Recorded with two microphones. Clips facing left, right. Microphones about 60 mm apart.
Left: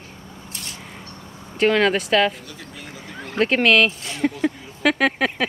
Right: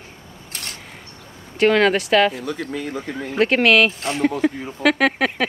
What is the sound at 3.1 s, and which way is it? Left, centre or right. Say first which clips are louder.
Speech: right 1 dB; centre.